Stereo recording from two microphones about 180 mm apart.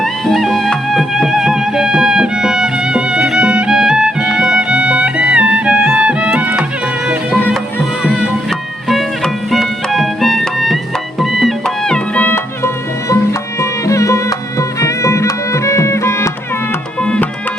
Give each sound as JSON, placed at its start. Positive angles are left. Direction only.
{"t": 0.0, "sound": "music", "side_deg": 0}
{"t": 7.3, "sound": "music", "side_deg": 10}